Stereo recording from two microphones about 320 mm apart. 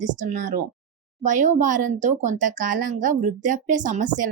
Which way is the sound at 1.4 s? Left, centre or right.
Right.